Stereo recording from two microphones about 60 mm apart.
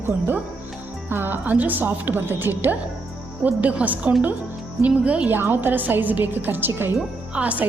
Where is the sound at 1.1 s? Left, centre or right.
Right.